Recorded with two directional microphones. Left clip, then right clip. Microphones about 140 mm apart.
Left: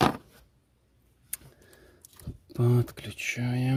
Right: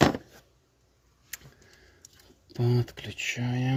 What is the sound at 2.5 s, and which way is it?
Speech, 30° left (ahead or behind).